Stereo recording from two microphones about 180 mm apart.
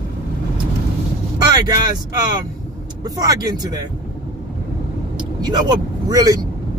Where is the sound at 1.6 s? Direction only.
20° right (ahead or behind).